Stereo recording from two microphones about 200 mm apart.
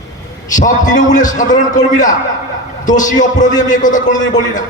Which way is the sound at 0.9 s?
40° left (ahead or behind).